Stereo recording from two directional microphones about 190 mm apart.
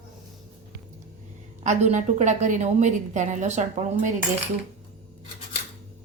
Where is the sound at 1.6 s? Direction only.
40° right (ahead or behind).